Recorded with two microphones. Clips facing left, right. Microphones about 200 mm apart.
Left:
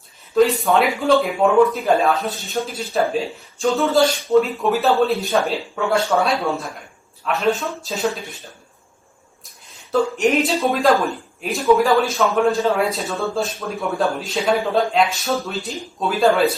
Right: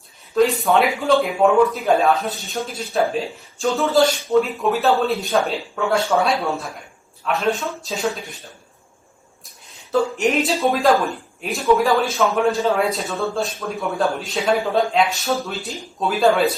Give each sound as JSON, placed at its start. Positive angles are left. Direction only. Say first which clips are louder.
{"t": 0.6, "sound": "speech", "louder": "even", "side_deg": 0}
{"t": 9.9, "sound": "speech", "louder": "left 1 dB", "side_deg": 0}